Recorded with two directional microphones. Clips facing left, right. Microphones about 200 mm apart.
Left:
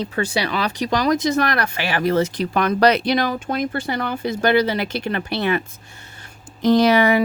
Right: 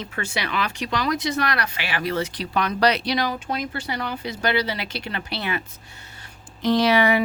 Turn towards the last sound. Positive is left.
turn(degrees=45)  # may be behind; listen again after turning